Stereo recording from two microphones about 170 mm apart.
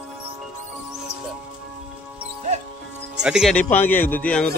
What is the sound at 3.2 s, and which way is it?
Speech, 5° right (ahead or behind).